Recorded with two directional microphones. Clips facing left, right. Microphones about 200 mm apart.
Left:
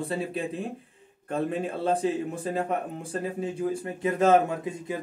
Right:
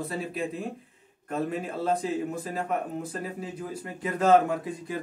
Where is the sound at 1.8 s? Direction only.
30° left (ahead or behind).